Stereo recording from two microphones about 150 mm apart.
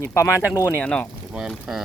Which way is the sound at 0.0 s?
20° left (ahead or behind).